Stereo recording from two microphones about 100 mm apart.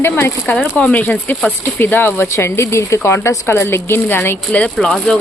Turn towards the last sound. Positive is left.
turn(degrees=5)  # may be behind; listen again after turning